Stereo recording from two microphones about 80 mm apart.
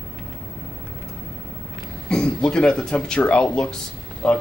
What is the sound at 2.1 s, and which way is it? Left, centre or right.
Speech, centre.